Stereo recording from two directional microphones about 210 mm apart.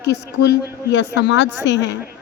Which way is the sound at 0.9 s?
55° left (ahead or behind).